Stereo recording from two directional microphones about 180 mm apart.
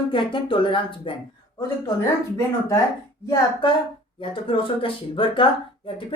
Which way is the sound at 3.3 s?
25° left (ahead or behind).